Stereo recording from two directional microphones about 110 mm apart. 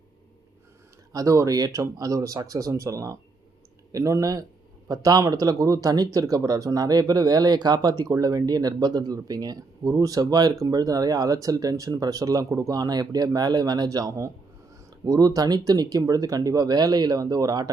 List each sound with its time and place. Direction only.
1.1 s speech: 30° right (ahead or behind)